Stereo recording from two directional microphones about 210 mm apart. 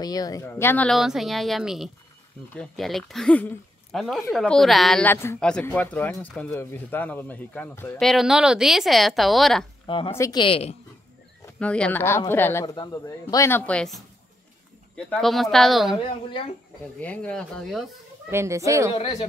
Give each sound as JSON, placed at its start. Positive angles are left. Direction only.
{"t": 0.0, "sound": "a woman's voice", "side_deg": 20}
{"t": 9.8, "sound": "a woman's voice", "side_deg": 25}
{"t": 11.6, "sound": "speech", "side_deg": 5}
{"t": 15.0, "sound": "a woman's voice", "side_deg": 0}
{"t": 17.0, "sound": "a woman's voice", "side_deg": 5}
{"t": 18.3, "sound": "a woman's voice", "side_deg": -15}